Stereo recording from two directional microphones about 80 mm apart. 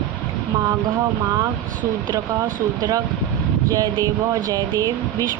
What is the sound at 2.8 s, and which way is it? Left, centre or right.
Speech, right.